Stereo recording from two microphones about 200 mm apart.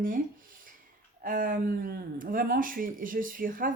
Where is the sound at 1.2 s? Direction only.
45° right (ahead or behind).